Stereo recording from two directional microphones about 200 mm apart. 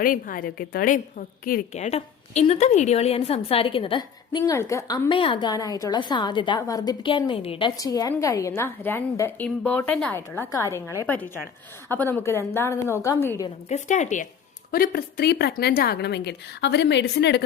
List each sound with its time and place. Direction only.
0.0 s a woman's voice: 45° left (ahead or behind); by 7.7 s 30° left (ahead or behind)
7.8 s a woman's voice: 15° left (ahead or behind)
13.7 s a woman's voice: 35° left (ahead or behind)
14.7 s a woman's voice: 50° left (ahead or behind)